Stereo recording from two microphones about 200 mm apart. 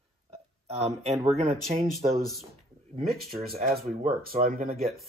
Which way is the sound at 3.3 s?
50° right (ahead or behind).